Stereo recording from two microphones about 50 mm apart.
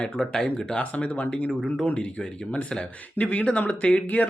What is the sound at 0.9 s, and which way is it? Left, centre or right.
Speech, left.